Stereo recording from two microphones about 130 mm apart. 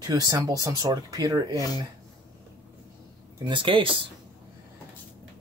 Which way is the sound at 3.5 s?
40° right (ahead or behind).